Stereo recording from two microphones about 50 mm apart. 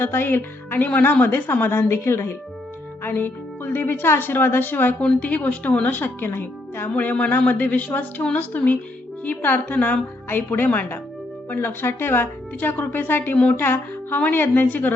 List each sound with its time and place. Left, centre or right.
0.0 s a woman's voice: left
3.0 s a woman's voice: left
5.2 s speech: left
6.9 s a woman's voice: left
8.5 s speech: left
10.2 s a woman's voice: left
12.5 s speech: left
13.3 s a woman's voice: left
13.6 s music: left
14.2 s speech: left